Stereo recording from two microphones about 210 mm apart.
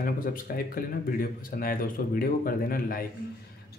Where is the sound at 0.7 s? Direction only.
45° left (ahead or behind).